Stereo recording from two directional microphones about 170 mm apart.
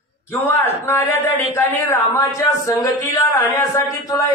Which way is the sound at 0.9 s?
10° left (ahead or behind).